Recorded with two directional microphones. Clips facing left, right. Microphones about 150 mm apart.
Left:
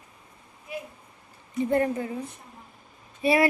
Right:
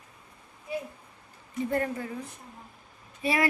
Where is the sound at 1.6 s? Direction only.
20° left (ahead or behind).